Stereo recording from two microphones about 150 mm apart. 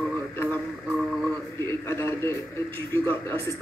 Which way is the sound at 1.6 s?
15° left (ahead or behind).